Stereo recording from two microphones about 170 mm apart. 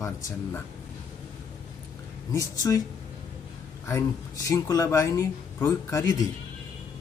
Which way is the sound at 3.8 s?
20° left (ahead or behind).